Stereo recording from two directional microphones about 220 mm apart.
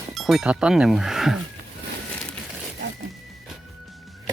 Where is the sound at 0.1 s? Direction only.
Centre (ahead or behind).